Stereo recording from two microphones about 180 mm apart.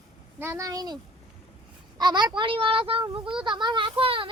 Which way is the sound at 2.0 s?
25° right (ahead or behind).